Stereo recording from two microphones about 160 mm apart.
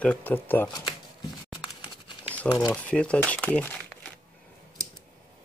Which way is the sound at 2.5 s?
20° left (ahead or behind).